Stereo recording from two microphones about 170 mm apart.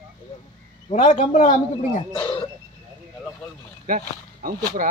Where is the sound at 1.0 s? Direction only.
45° left (ahead or behind).